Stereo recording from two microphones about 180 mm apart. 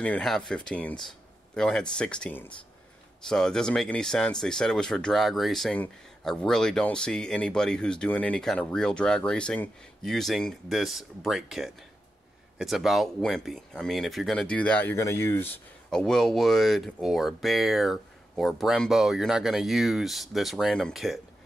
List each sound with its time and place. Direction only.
0.0 s speech: 5° left (ahead or behind)